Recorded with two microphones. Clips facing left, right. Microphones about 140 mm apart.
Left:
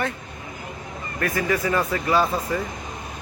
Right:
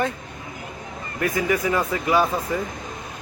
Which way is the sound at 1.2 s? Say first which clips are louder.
Right 1 dB; 15° right (ahead or behind).